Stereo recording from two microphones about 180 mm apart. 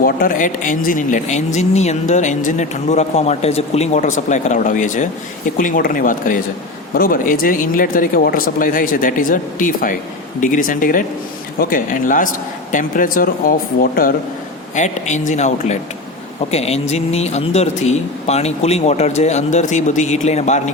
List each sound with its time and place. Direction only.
0.0 s speech: 50° left (ahead or behind)
14.8 s speech: 40° left (ahead or behind)